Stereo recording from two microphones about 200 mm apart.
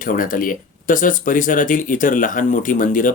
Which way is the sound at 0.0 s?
45° left (ahead or behind).